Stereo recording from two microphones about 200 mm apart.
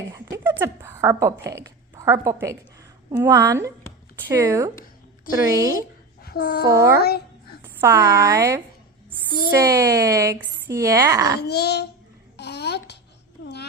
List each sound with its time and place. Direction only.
0.1 s a sound: 15° right (ahead or behind)
0.6 s a woman's voice: 15° right (ahead or behind)
4.7 s a sound: 45° left (ahead or behind)
5.5 s a woman's voice: 15° right (ahead or behind)
6.2 s speech: 50° left (ahead or behind)
6.7 s a woman's voice: 15° right (ahead or behind)
11.3 s a child's voice: 55° left (ahead or behind)
12.4 s babbling: 55° left (ahead or behind)